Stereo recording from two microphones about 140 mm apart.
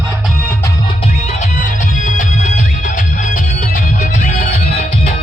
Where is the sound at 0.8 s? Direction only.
50° left (ahead or behind).